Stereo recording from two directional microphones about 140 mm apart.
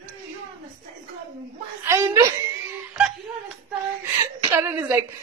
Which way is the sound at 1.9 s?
20° right (ahead or behind).